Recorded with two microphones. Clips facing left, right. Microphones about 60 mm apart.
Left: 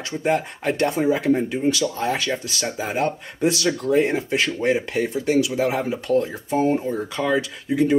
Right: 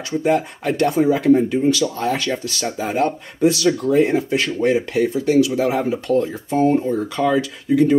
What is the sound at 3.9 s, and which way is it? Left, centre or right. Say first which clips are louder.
Speech: right 3 dB; left.